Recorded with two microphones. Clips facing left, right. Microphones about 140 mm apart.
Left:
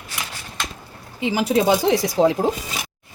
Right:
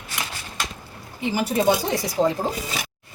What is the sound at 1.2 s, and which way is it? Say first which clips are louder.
Speech: left 3 dB; 90° left.